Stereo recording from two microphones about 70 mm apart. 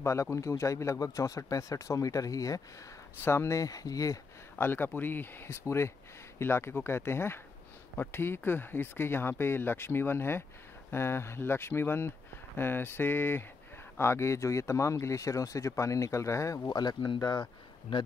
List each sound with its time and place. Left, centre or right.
0.0 s speech: left
3.3 s speech: left
4.6 s speech: left
16.6 s speech: left